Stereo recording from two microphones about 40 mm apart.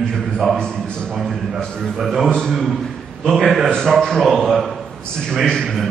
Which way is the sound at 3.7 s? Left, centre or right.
Centre.